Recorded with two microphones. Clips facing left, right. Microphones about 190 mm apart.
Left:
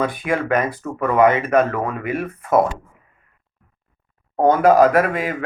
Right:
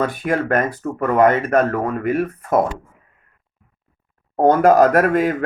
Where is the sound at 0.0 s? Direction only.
40° right (ahead or behind).